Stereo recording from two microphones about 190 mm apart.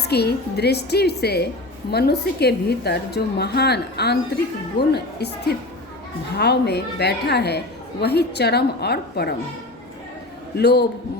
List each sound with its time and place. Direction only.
0.1 s a woman's voice: 60° left (ahead or behind)
10.6 s a woman's voice: 60° left (ahead or behind)